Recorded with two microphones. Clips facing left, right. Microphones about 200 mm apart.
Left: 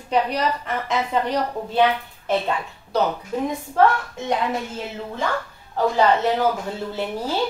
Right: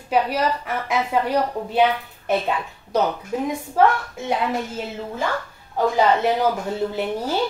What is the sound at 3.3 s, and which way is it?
Speech, 10° right (ahead or behind).